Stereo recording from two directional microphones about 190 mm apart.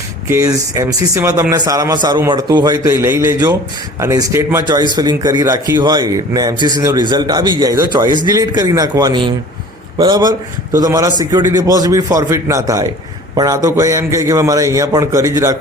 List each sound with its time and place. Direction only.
0.3 s a man's voice: 15° right (ahead or behind)